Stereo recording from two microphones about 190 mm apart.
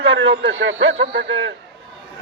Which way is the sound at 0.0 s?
75° right (ahead or behind).